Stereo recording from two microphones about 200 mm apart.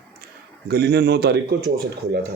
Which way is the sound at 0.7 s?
55° right (ahead or behind).